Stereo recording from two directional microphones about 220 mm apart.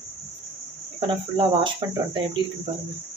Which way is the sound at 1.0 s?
20° right (ahead or behind).